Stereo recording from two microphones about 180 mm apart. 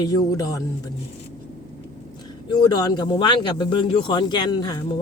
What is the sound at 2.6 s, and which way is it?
Speech, 20° left (ahead or behind).